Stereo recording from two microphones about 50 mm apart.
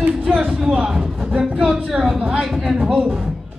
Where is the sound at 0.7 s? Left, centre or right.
Centre.